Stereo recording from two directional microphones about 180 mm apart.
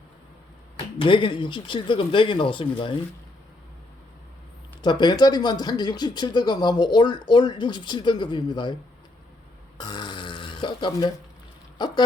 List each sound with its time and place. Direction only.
1.0 s speech: 25° left (ahead or behind)
4.8 s speech: 25° left (ahead or behind)
9.7 s burping: 25° left (ahead or behind)
11.8 s speech: 25° left (ahead or behind)